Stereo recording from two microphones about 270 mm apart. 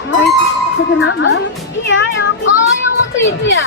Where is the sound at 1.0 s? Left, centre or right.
Left.